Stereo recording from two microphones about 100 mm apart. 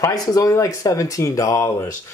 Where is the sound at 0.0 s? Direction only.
35° left (ahead or behind).